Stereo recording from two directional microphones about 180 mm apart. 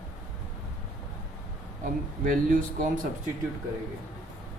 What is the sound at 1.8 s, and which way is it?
Speech, 50° right (ahead or behind).